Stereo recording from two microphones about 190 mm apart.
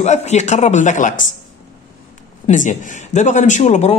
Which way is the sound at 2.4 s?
40° left (ahead or behind).